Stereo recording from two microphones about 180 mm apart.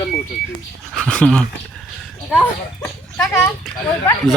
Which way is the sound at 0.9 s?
5° left (ahead or behind).